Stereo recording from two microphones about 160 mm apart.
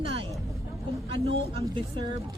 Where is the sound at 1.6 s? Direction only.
30° right (ahead or behind).